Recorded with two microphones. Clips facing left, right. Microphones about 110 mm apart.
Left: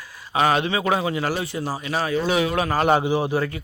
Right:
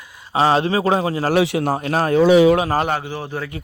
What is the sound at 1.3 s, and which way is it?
Speech, 70° right (ahead or behind).